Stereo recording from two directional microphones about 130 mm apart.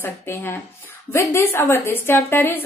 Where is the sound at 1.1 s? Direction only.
20° left (ahead or behind).